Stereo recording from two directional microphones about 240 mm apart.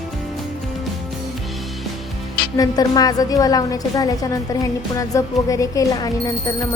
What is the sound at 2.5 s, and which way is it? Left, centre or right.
A woman's voice, centre.